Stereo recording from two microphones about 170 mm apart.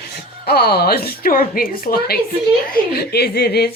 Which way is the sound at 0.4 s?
70° left (ahead or behind).